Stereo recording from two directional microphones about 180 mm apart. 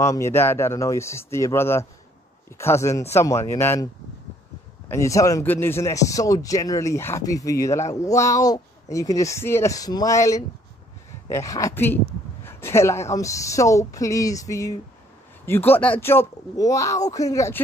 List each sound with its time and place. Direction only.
0.0 s speech: 15° left (ahead or behind)